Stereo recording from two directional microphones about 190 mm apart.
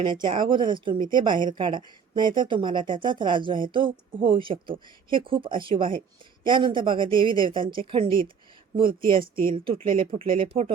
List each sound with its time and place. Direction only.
0.0 s speech: 25° right (ahead or behind)
9.1 s speech: 50° right (ahead or behind)
9.6 s speech: 35° right (ahead or behind)